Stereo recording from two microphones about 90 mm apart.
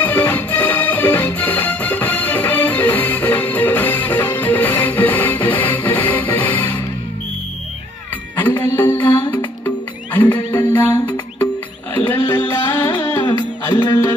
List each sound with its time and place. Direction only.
0.0 s music: 15° left (ahead or behind)
8.4 s music: 20° left (ahead or behind)